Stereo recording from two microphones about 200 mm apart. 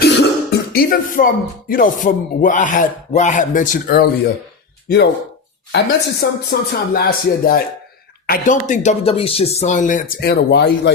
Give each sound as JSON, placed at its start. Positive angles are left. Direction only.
{"t": 0.0, "sound": "music", "side_deg": 50}
{"t": 5.7, "sound": "speech", "side_deg": 50}